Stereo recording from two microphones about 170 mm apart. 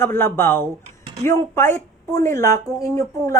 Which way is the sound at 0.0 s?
15° left (ahead or behind).